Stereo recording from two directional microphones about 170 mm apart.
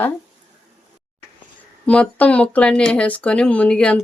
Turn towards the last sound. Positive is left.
turn(degrees=5)  # may be behind; listen again after turning